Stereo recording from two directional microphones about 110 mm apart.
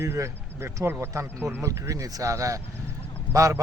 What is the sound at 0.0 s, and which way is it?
Speech, 25° right (ahead or behind).